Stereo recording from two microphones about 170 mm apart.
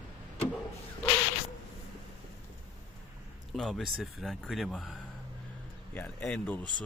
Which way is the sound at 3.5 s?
Centre (ahead or behind).